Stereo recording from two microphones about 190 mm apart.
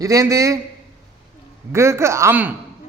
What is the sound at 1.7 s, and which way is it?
Speech, 15° right (ahead or behind).